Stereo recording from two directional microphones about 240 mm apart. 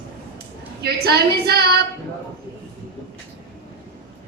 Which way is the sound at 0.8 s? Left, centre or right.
Right.